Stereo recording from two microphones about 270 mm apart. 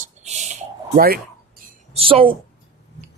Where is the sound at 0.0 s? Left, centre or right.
Right.